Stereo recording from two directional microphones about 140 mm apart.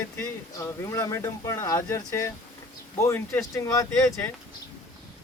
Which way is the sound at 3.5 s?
25° left (ahead or behind).